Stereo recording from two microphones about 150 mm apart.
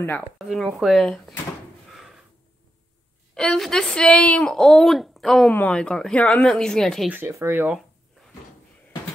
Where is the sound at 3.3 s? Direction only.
5° left (ahead or behind).